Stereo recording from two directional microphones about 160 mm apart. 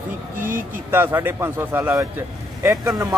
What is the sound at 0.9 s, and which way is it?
A man's voice, 15° right (ahead or behind).